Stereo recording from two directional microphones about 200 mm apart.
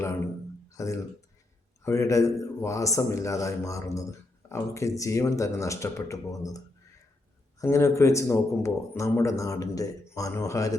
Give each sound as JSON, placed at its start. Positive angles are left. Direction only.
{"t": 0.7, "sound": "a sound", "side_deg": 15}
{"t": 1.8, "sound": "a man's voice", "side_deg": 15}
{"t": 7.6, "sound": "a man's voice", "side_deg": 15}